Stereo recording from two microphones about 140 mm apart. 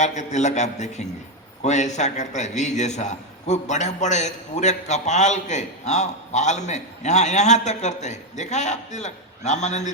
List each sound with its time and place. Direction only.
0.0 s a man's voice: 55° left (ahead or behind)